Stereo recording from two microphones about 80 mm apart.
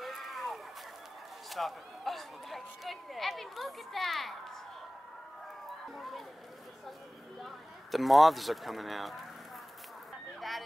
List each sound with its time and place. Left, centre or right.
0.0 s vehicle: centre
1.5 s speech: centre
5.9 s speech: centre
7.4 s speech: centre